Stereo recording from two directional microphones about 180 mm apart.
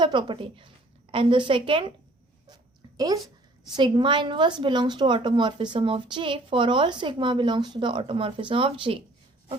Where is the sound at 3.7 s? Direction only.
25° right (ahead or behind).